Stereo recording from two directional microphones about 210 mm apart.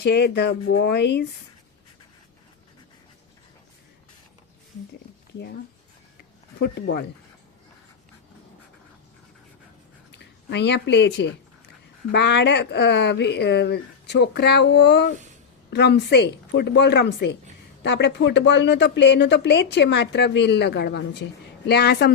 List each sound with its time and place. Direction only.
0.0 s speech: 50° left (ahead or behind)
6.6 s speech: 50° left (ahead or behind)
10.1 s speech: 55° left (ahead or behind)